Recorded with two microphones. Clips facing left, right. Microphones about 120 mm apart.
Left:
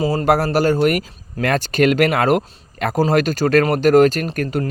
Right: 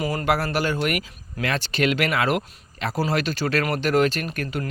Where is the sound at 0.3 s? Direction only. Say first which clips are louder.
Left 7 dB; 40° left (ahead or behind).